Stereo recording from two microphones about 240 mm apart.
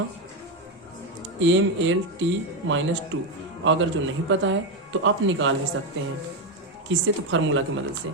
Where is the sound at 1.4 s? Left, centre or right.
Right.